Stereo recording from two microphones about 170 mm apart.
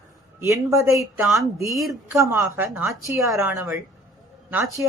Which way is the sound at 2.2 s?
15° right (ahead or behind).